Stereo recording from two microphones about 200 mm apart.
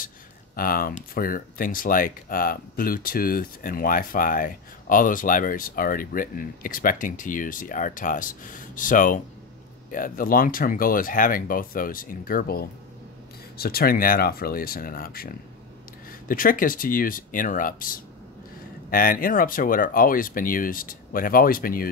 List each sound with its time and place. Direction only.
0.6 s speech: 45° left (ahead or behind)